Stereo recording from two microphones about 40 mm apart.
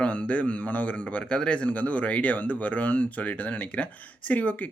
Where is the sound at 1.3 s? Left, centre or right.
Left.